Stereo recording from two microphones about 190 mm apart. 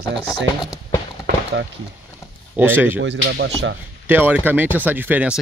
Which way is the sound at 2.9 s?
70° right (ahead or behind).